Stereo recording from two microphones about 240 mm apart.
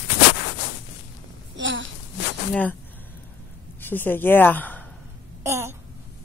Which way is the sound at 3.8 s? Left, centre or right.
Centre.